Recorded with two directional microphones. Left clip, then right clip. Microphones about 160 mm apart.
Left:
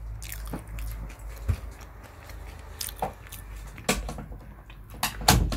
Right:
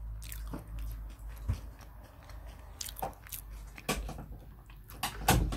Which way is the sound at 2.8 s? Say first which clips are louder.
Left 6 dB; 5° right (ahead or behind).